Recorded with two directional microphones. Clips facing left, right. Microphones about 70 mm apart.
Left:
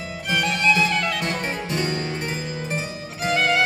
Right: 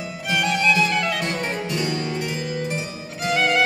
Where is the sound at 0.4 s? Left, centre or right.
Centre.